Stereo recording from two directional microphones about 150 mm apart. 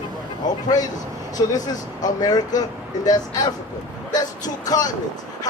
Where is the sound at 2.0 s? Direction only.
25° left (ahead or behind).